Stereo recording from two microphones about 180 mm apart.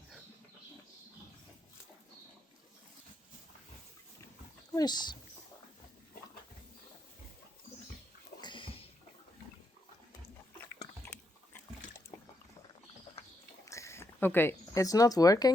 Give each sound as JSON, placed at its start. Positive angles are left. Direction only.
{"t": 4.7, "sound": "speech", "side_deg": 20}
{"t": 8.4, "sound": "bathtub", "side_deg": 25}
{"t": 13.7, "sound": "speech", "side_deg": 15}